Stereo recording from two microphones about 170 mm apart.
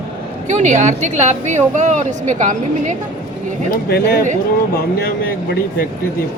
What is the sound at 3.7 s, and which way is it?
Speech, 65° left (ahead or behind).